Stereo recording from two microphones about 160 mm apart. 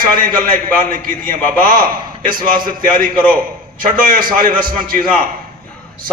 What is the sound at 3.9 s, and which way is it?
A man's voice, 60° right (ahead or behind).